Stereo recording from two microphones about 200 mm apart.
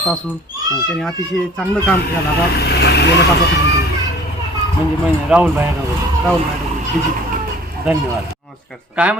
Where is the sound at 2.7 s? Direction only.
55° left (ahead or behind).